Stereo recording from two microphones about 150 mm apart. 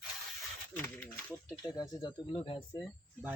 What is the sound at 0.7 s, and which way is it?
Speech, 10° left (ahead or behind).